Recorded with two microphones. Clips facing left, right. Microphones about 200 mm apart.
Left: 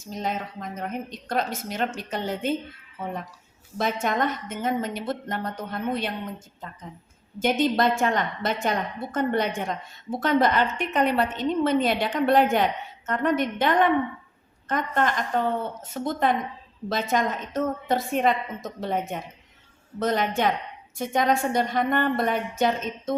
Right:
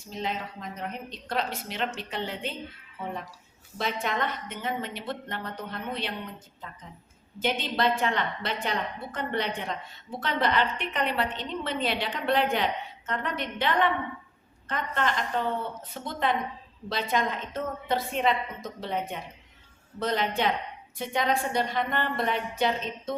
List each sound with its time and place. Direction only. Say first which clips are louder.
0.1 s a woman's voice: left 3 dB; 45° left (ahead or behind)
3.8 s a woman's voice: left 5 dB; 45° left (ahead or behind)
7.3 s a woman's voice: left 6 dB; 45° left (ahead or behind)